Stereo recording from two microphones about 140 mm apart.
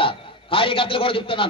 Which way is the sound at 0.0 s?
40° left (ahead or behind).